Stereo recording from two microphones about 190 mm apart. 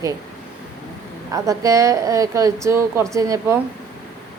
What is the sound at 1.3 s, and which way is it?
A woman's voice, 15° right (ahead or behind).